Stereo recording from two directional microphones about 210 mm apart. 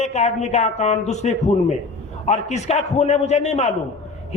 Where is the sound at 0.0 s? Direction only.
30° left (ahead or behind).